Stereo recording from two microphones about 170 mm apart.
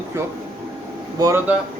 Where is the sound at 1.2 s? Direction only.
15° right (ahead or behind).